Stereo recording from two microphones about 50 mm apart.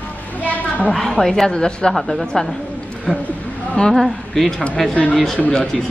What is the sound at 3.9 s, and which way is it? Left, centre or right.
Speech, centre.